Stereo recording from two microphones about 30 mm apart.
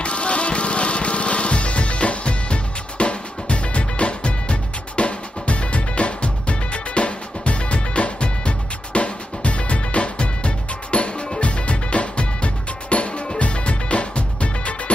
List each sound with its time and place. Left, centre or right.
0.0 s music: left